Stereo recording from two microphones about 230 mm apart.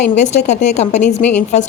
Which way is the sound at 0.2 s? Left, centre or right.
Left.